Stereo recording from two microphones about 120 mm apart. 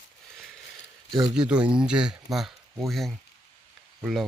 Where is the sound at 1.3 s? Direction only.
10° right (ahead or behind).